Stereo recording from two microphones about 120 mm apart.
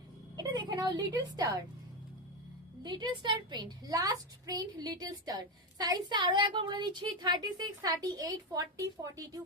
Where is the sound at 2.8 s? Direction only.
35° right (ahead or behind).